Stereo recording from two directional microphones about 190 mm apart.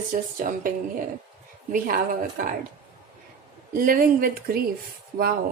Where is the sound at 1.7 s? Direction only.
45° right (ahead or behind).